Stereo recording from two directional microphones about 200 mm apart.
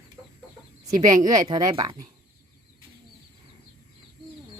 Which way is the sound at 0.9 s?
20° right (ahead or behind).